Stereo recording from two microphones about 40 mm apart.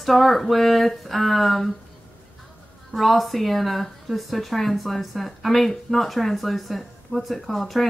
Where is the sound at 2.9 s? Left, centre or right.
Centre.